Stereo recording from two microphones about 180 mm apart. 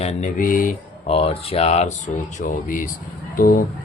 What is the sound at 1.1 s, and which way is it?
Speech, 35° left (ahead or behind).